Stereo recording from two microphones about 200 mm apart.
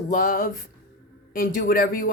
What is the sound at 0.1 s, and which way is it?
Speech, 45° left (ahead or behind).